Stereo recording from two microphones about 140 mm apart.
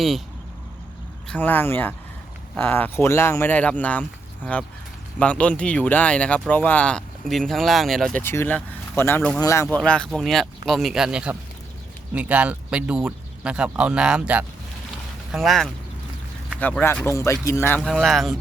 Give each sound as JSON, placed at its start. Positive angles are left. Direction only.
{"t": 1.3, "sound": "speech", "side_deg": 15}
{"t": 8.2, "sound": "speech", "side_deg": 15}
{"t": 17.7, "sound": "speech", "side_deg": 0}